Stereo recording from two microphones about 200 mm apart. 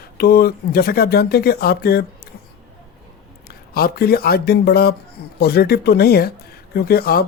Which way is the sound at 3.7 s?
50° left (ahead or behind).